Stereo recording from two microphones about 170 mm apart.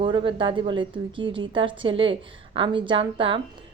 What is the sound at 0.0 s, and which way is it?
A woman's voice, 30° right (ahead or behind).